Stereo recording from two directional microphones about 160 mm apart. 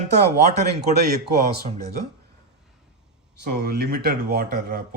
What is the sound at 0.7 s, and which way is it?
Speech, 90° right.